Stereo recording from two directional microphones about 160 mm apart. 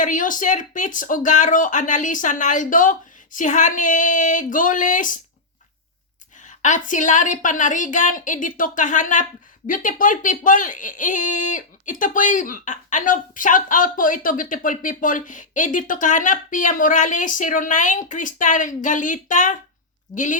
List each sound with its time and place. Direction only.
0.0 s speech: 55° left (ahead or behind)
6.4 s speech: 50° left (ahead or behind)